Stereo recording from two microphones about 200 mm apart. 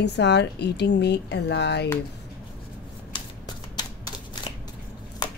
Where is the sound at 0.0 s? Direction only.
60° left (ahead or behind).